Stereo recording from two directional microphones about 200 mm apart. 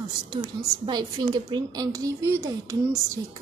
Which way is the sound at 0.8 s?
20° right (ahead or behind).